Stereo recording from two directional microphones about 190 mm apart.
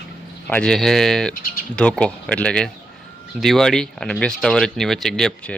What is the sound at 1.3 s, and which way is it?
Bird, 50° left (ahead or behind).